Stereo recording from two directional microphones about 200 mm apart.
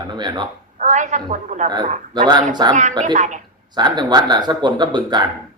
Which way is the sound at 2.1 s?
20° right (ahead or behind).